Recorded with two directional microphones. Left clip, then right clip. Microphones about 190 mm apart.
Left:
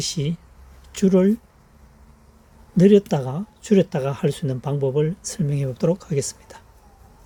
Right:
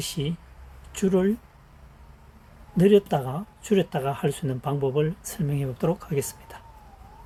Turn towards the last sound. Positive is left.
turn(degrees=30)  # may be behind; listen again after turning